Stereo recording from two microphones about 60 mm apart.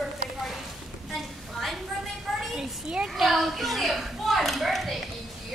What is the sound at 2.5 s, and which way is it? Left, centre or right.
Children playing, centre.